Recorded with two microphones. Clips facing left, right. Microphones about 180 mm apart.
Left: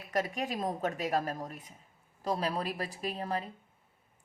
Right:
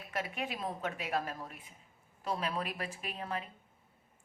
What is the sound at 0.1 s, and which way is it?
A woman's voice, 40° left (ahead or behind).